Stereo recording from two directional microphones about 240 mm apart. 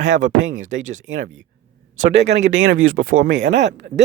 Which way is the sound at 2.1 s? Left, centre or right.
Right.